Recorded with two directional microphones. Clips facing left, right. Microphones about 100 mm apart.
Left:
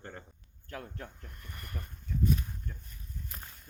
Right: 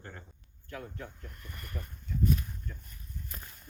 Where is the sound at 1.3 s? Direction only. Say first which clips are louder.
Right 1 dB; 35° left (ahead or behind).